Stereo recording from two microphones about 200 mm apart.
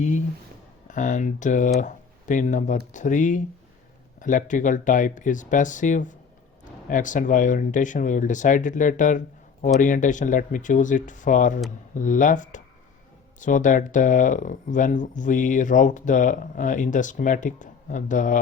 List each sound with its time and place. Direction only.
0.9 s speech: 40° left (ahead or behind)